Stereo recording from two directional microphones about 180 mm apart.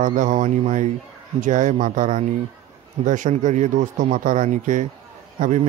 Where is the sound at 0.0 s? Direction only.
45° right (ahead or behind).